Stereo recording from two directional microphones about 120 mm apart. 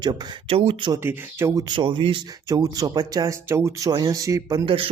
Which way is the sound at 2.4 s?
30° right (ahead or behind).